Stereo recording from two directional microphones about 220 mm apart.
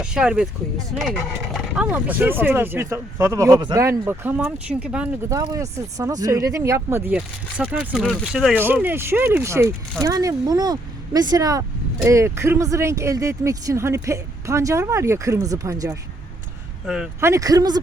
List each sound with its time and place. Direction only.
0.0 s speech: 5° right (ahead or behind)
16.8 s speech: 5° right (ahead or behind)